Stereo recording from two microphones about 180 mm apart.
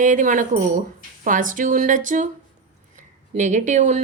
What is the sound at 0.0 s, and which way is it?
Speech, 45° right (ahead or behind).